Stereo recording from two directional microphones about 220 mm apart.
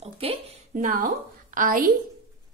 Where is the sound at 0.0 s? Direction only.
25° right (ahead or behind).